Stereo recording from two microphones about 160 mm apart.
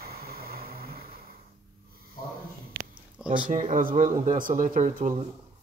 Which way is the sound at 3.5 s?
55° right (ahead or behind).